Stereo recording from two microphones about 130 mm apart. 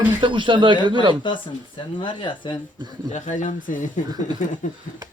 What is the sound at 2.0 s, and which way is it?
Speech, 40° left (ahead or behind).